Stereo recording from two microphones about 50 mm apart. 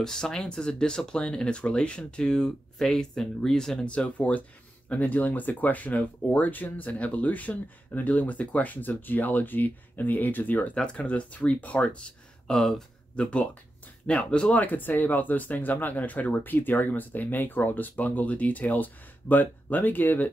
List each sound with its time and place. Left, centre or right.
0.0 s speech: centre
3.8 s speech: left
10.7 s speech: left
12.4 s speech: centre
13.1 s speech: left
14.6 s speech: left